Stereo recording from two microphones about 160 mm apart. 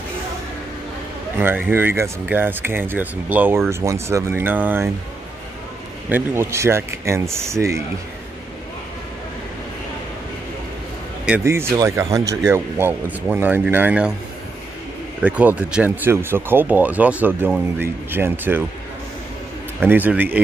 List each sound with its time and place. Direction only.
1.4 s speech: 15° right (ahead or behind)
6.0 s speech: 15° right (ahead or behind)
11.2 s speech: 15° right (ahead or behind)
15.2 s speech: 10° right (ahead or behind)
19.9 s speech: 10° right (ahead or behind)